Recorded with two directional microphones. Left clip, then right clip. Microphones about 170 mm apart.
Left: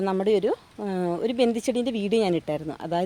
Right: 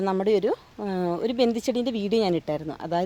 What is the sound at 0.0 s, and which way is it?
Speech, centre (ahead or behind).